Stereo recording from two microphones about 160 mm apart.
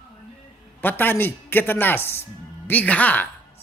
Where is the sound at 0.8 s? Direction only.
10° left (ahead or behind).